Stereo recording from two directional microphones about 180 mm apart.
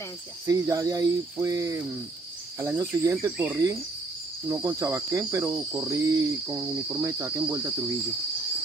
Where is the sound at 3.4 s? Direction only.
10° right (ahead or behind).